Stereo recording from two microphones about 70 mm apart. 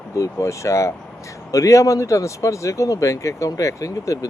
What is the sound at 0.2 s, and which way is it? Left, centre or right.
Speech, left.